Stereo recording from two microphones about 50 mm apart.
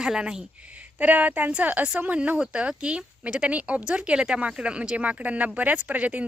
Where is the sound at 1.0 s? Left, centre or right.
Right.